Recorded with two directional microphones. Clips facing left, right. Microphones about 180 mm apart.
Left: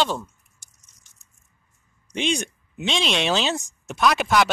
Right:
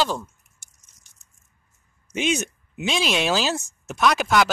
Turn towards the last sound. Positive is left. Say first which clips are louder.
# even
turn(degrees=0)  # may be behind; listen again after turning